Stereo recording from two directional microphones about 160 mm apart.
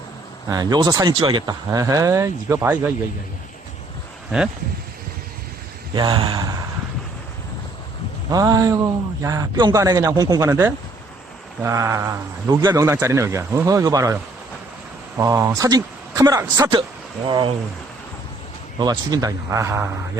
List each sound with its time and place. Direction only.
0.4 s speech: 25° right (ahead or behind)
5.9 s speech: 30° right (ahead or behind)
8.3 s speech: 25° right (ahead or behind)
10.5 s a sound: 15° right (ahead or behind)
12.5 s speech: 25° right (ahead or behind)
15.2 s speech: 20° right (ahead or behind)
18.8 s speech: 25° right (ahead or behind)